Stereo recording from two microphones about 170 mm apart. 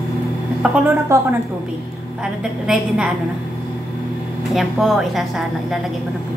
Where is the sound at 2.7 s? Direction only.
5° right (ahead or behind).